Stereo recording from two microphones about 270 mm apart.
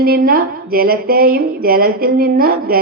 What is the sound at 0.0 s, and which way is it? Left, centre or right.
A woman's voice, right.